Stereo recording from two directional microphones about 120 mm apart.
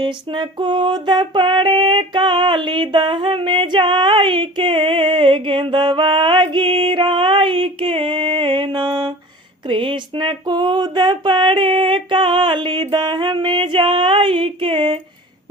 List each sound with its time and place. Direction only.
0.0 s female singing: 40° right (ahead or behind)
9.6 s a sound: 45° right (ahead or behind)
12.9 s female singing: 40° right (ahead or behind)